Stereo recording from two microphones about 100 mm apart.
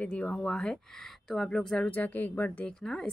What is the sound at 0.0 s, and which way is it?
A woman's voice, 10° left (ahead or behind).